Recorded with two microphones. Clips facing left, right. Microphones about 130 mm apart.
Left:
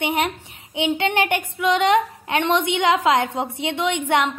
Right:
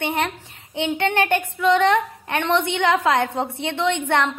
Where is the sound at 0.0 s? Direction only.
15° left (ahead or behind).